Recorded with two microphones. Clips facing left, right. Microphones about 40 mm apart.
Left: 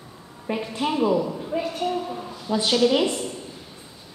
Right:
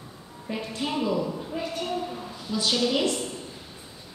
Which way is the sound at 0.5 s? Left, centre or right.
Centre.